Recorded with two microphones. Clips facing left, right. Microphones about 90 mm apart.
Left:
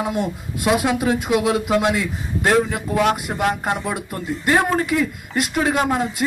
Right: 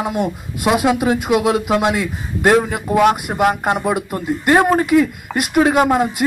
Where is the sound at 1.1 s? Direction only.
60° right (ahead or behind).